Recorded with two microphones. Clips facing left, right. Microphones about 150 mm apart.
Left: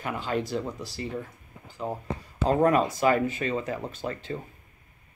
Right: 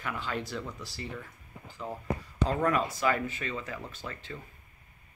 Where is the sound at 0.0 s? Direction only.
30° left (ahead or behind).